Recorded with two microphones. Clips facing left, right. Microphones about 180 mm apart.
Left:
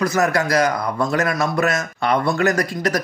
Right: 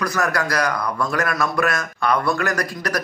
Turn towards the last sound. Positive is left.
turn(degrees=25)  # may be behind; listen again after turning